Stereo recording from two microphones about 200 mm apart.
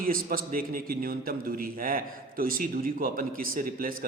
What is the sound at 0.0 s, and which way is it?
A man's voice, 45° right (ahead or behind).